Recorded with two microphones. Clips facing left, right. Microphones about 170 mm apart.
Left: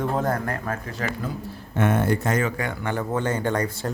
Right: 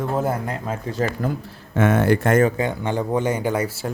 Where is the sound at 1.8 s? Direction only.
90° right; by 2.4 s 60° right (ahead or behind).